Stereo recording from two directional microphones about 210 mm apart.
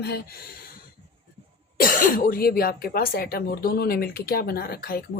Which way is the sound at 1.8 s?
40° left (ahead or behind).